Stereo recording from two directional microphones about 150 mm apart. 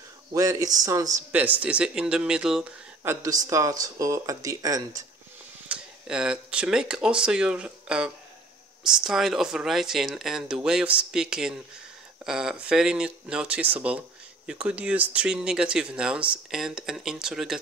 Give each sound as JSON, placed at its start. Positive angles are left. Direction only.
{"t": 0.3, "sound": "speech", "side_deg": -20}
{"t": 1.3, "sound": "speech", "side_deg": -10}
{"t": 3.0, "sound": "speech", "side_deg": -20}
{"t": 5.7, "sound": "speech", "side_deg": -5}